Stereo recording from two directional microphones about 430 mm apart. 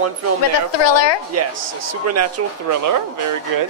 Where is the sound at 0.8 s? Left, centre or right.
Left.